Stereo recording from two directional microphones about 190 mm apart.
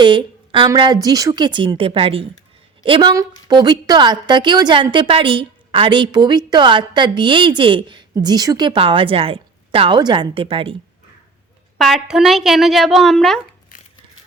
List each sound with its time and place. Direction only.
0.0 s a woman's voice: 25° right (ahead or behind)
11.8 s a woman's voice: centre (ahead or behind)